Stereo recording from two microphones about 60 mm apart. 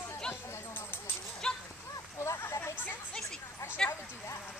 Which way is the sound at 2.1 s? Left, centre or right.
Left.